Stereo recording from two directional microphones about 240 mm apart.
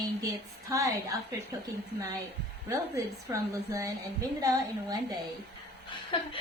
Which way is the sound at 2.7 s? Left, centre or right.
Centre.